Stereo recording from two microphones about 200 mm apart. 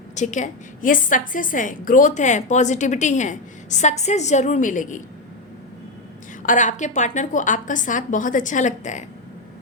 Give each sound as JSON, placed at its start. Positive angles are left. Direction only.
{"t": 0.2, "sound": "a woman's voice", "side_deg": 35}
{"t": 6.4, "sound": "a woman's voice", "side_deg": 40}